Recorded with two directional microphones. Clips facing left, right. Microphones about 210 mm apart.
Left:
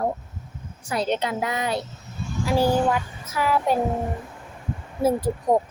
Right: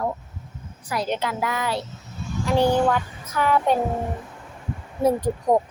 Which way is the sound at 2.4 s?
5° left (ahead or behind).